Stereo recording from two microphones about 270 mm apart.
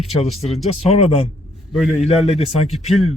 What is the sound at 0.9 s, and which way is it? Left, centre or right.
Speech, left.